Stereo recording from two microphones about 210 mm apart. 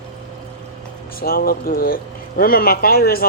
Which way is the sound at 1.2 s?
45° left (ahead or behind).